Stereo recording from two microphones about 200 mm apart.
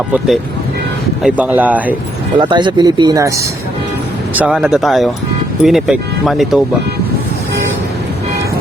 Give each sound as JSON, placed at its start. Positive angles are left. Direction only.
{"t": 1.2, "sound": "speech", "side_deg": -5}
{"t": 2.4, "sound": "speech", "side_deg": -25}
{"t": 4.4, "sound": "speech", "side_deg": -5}